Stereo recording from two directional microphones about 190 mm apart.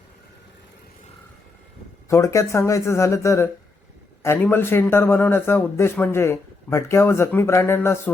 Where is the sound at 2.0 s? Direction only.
15° left (ahead or behind).